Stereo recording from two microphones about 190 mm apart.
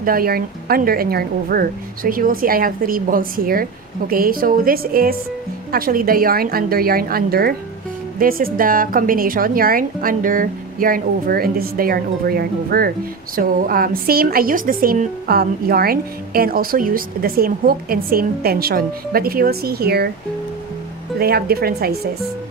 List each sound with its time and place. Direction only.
0.0 s a woman's voice: 50° right (ahead or behind)
21.2 s a woman's voice: 55° right (ahead or behind)